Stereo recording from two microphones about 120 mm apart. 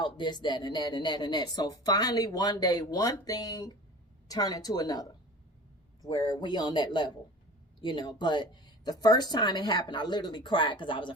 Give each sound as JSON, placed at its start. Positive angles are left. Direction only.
{"t": 0.0, "sound": "speech", "side_deg": 40}